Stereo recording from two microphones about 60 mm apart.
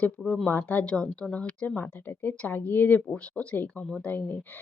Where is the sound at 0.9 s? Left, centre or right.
Centre.